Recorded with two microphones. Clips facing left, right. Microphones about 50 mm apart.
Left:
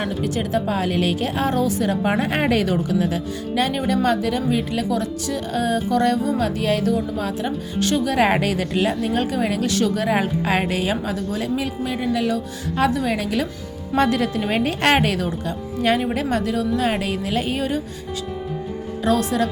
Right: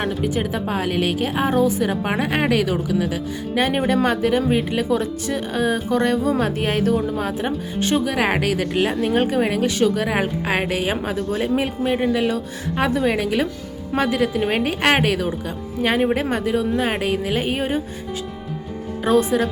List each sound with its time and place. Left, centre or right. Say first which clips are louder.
0.0 s a woman's voice: right 1 dB; centre
3.7 s speech: right 1 dB; right
8.0 s a woman's voice: left 2 dB; centre
9.0 s speech: right 3 dB; right
9.9 s a woman's voice: left 1 dB; centre
10.9 s a woman's voice: right 2 dB; right; by 16.0 s centre
16.0 s a woman's voice: right 2 dB; right
19.0 s speech: right 2 dB; centre